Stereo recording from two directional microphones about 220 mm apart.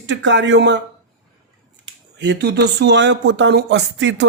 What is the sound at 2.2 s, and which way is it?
Speech, 50° right (ahead or behind).